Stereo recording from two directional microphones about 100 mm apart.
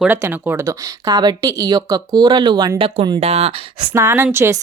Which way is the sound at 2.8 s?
75° right (ahead or behind).